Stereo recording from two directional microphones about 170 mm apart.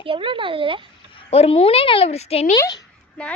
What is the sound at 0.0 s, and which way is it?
Speech, 30° right (ahead or behind).